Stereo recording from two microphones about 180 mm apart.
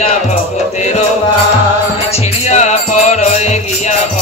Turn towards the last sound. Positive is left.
turn(degrees=40)  # may be behind; listen again after turning